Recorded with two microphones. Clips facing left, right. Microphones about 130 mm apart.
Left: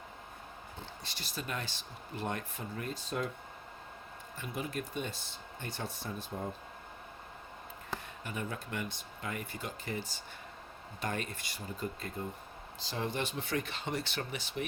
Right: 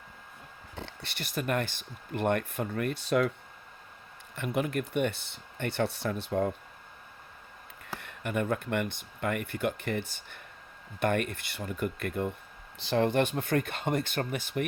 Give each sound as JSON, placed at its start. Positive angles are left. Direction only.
{"t": 0.8, "sound": "speech", "side_deg": -65}
{"t": 4.4, "sound": "speech", "side_deg": -60}
{"t": 7.9, "sound": "speech", "side_deg": -65}